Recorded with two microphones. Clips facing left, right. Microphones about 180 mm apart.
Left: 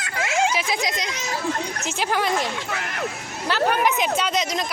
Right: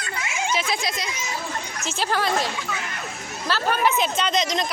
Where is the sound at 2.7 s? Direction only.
70° left (ahead or behind).